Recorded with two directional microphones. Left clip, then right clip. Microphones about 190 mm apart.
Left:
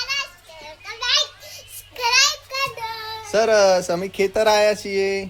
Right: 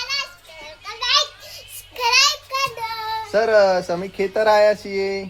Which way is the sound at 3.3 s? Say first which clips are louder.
Even; 25° left (ahead or behind).